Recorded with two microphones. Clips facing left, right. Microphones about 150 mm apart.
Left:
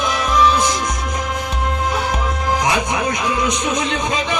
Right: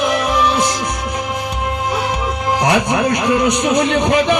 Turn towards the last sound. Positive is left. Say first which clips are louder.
# right 7 dB
turn(degrees=-65)  # may be behind; listen again after turning